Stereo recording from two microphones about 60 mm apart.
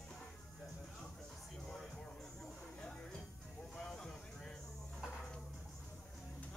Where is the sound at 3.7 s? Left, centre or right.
Centre.